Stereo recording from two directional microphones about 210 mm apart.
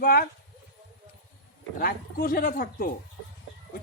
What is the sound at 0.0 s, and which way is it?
Speech, 45° left (ahead or behind).